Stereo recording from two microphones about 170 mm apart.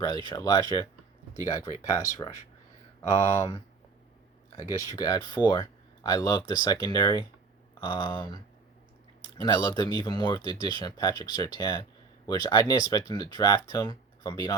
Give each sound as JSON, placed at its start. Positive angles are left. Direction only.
{"t": 0.3, "sound": "speech", "side_deg": 20}
{"t": 4.7, "sound": "speech", "side_deg": 20}
{"t": 9.4, "sound": "speech", "side_deg": 25}